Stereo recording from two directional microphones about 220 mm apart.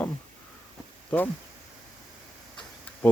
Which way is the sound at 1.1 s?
5° left (ahead or behind).